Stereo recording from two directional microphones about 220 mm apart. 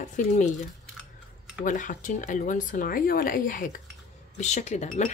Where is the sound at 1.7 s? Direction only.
35° left (ahead or behind).